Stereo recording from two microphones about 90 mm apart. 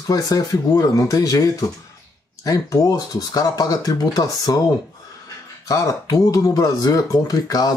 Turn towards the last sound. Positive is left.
turn(degrees=45)  # may be behind; listen again after turning